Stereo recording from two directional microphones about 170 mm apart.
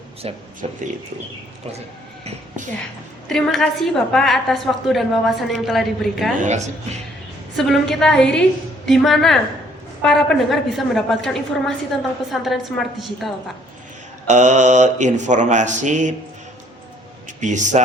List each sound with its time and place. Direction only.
0.2 s speech: 35° right (ahead or behind)
3.2 s a woman's voice: 5° left (ahead or behind)
7.5 s a woman's voice: centre (ahead or behind)
14.3 s speech: 45° right (ahead or behind)
17.4 s speech: 45° right (ahead or behind)